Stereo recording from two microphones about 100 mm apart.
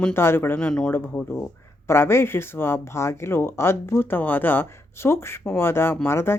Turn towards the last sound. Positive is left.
turn(degrees=25)  # may be behind; listen again after turning